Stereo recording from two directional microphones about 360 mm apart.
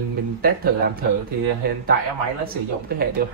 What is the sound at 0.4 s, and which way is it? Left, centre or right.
Speech, right.